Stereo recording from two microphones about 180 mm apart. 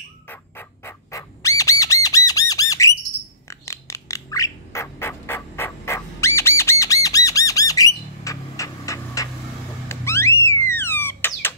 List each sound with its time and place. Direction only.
0.3 s squawk: 15° left (ahead or behind)
3.4 s duck: 15° left (ahead or behind)
9.8 s a sound: 15° left (ahead or behind)